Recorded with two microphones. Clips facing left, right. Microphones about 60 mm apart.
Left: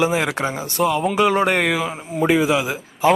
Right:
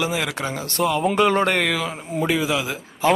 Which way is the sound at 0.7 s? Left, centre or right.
Centre.